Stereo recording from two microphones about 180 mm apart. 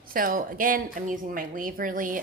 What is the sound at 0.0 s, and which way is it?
Speech, 50° right (ahead or behind).